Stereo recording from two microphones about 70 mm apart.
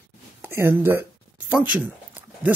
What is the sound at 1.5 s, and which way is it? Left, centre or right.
Speech, centre.